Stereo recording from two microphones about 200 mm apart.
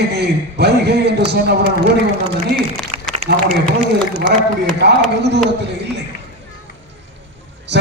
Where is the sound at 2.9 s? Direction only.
25° right (ahead or behind).